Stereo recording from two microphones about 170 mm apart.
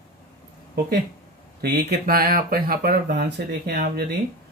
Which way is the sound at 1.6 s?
65° right (ahead or behind).